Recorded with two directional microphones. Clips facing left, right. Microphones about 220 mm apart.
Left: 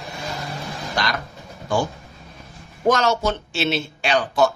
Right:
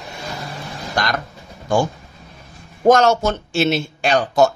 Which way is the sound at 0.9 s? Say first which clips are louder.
Right 3 dB; 50° right (ahead or behind).